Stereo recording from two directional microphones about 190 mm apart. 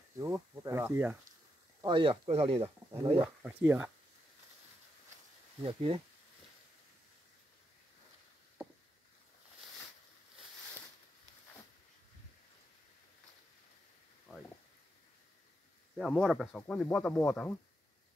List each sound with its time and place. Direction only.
0.2 s speech: 15° right (ahead or behind)
1.8 s speech: 25° right (ahead or behind)
3.2 s speech: 10° right (ahead or behind)
5.6 s speech: 30° right (ahead or behind)
16.0 s speech: centre (ahead or behind)